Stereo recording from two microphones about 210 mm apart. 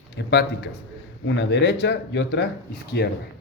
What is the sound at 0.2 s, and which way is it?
A man's voice, 55° left (ahead or behind).